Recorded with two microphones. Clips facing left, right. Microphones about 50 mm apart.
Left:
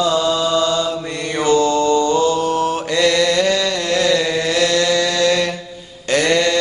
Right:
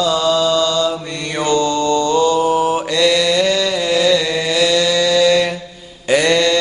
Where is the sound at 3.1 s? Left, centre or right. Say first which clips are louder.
Even; centre.